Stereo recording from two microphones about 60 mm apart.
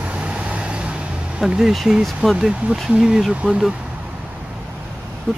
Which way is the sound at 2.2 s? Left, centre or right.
Centre.